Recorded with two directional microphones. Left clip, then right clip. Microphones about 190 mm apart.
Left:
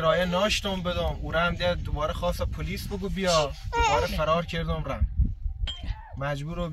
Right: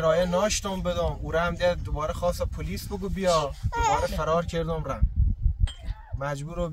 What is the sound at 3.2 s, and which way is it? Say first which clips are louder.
Speech: even; 40° right (ahead or behind).